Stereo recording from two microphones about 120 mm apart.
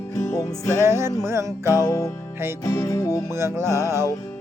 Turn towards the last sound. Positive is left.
turn(degrees=-20)  # may be behind; listen again after turning